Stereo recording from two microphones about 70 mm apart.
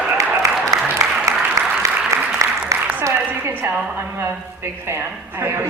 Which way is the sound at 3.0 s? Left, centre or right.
Right.